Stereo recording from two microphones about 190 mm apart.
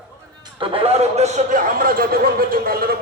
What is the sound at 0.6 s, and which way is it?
A man's voice, 30° right (ahead or behind).